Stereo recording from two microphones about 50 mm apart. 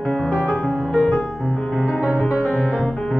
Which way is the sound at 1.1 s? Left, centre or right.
Centre.